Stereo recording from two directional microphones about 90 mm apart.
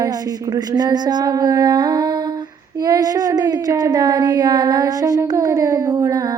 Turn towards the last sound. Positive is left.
turn(degrees=-40)  # may be behind; listen again after turning